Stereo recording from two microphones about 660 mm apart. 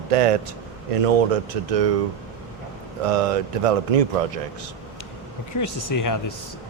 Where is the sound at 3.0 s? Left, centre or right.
Right.